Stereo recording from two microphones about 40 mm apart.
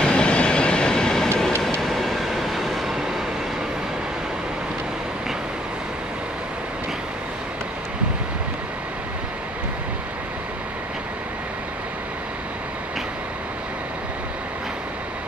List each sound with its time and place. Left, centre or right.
0.0 s train: left
1.8 s train: centre